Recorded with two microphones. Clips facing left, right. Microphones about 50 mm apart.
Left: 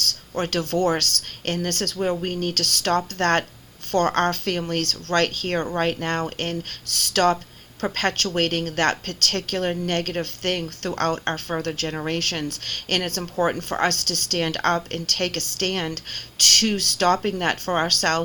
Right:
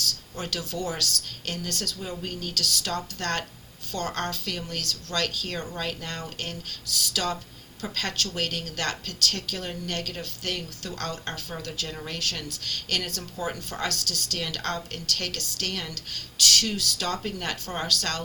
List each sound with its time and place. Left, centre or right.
0.0 s a woman's voice: left